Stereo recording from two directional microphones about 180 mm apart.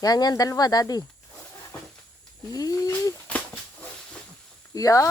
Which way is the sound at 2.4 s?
20° left (ahead or behind).